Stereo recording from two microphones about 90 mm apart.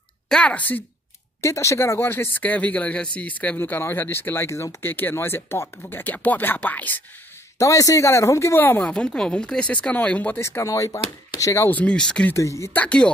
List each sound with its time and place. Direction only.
0.3 s speech: 10° left (ahead or behind)
1.4 s speech: 35° left (ahead or behind)
7.5 s speech: 35° left (ahead or behind)
8.8 s speech: 10° left (ahead or behind)
10.4 s speech: 35° left (ahead or behind)
11.7 s speech: 15° left (ahead or behind)
12.4 s speech: 35° left (ahead or behind)
12.7 s speech: 10° left (ahead or behind)